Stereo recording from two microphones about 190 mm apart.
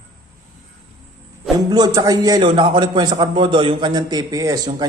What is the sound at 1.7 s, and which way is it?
A man's voice, 20° right (ahead or behind).